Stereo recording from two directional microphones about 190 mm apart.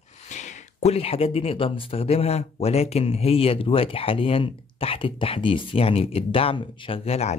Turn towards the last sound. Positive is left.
turn(degrees=35)  # may be behind; listen again after turning